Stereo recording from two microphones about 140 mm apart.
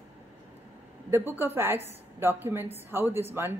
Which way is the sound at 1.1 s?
15° right (ahead or behind).